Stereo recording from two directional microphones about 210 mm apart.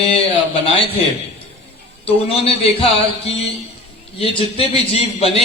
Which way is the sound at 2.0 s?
25° left (ahead or behind).